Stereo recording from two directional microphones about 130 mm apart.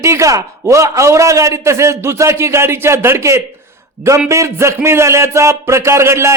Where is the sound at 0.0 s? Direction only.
25° right (ahead or behind).